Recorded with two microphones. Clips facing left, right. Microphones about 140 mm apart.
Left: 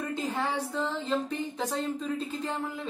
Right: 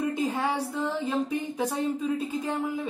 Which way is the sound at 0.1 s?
15° right (ahead or behind).